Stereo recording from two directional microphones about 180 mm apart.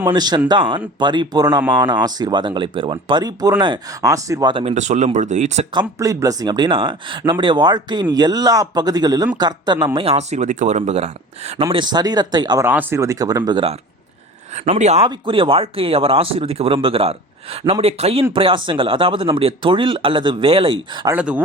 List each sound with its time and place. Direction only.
0.1 s speech: 25° right (ahead or behind); by 5.6 s 40° right (ahead or behind)
6.0 s speech: 20° right (ahead or behind); by 11.6 s 35° right (ahead or behind)
11.6 s speech: 25° right (ahead or behind)
12.6 s speech: 15° right (ahead or behind)
21.1 s speech: 10° right (ahead or behind)